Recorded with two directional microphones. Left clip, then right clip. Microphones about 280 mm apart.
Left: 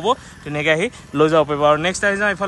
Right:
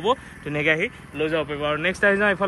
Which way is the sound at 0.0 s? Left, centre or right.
Centre.